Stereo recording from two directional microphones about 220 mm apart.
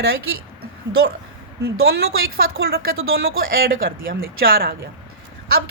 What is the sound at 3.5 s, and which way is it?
Speech, 40° right (ahead or behind).